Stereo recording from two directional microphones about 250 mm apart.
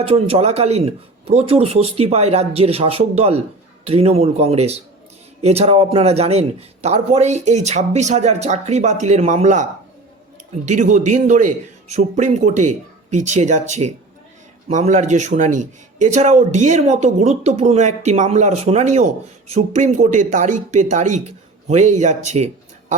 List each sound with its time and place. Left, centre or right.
0.0 s a man's voice: right
10.7 s a man's voice: right